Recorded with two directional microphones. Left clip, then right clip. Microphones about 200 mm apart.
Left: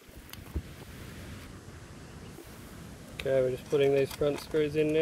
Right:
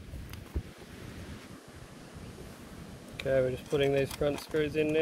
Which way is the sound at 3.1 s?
30° left (ahead or behind).